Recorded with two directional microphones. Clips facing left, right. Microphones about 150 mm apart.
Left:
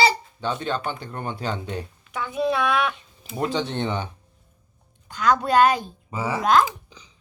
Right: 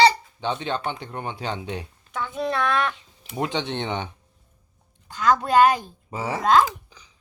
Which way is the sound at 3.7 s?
20° right (ahead or behind).